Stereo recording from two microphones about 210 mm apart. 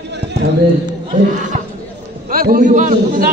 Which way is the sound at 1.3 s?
35° right (ahead or behind).